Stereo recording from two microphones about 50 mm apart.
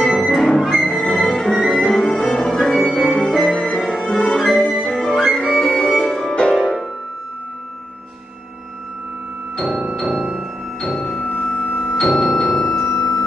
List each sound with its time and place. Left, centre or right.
0.3 s music: centre
2.9 s music: centre
4.9 s music: centre
9.7 s music: centre
11.0 s music: centre